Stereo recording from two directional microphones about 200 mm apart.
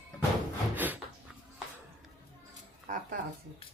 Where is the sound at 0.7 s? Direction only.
10° right (ahead or behind).